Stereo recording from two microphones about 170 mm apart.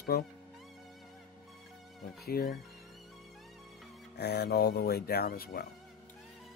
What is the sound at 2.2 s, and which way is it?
Speech, 65° left (ahead or behind).